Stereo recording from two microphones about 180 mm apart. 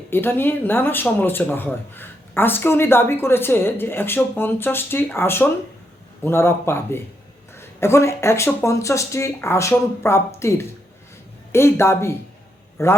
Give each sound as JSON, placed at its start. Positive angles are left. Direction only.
{"t": 0.1, "sound": "speech", "side_deg": 10}